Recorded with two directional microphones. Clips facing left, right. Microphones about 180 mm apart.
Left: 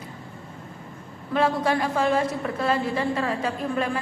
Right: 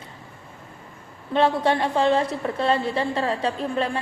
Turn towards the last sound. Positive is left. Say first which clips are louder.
# right 1 dB
turn(degrees=-30)  # may be behind; listen again after turning